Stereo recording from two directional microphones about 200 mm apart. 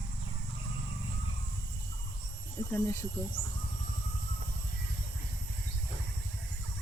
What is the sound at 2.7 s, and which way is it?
Speech, 15° left (ahead or behind).